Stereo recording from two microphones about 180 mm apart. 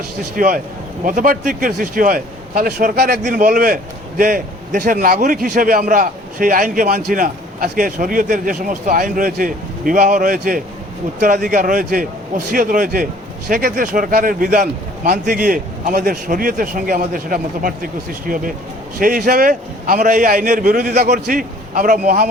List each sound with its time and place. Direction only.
0.3 s a man's voice: 50° right (ahead or behind)